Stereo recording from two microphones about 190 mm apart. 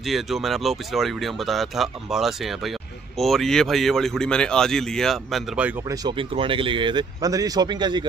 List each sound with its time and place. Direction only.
0.0 s speech: centre (ahead or behind)
5.9 s speech: 25° right (ahead or behind)